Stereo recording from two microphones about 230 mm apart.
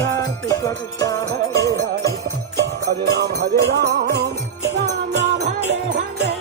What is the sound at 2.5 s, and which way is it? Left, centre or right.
Music, right.